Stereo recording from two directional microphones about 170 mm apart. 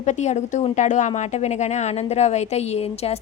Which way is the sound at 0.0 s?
45° left (ahead or behind).